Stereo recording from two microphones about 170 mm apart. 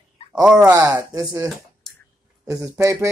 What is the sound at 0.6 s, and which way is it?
Speech, 15° right (ahead or behind).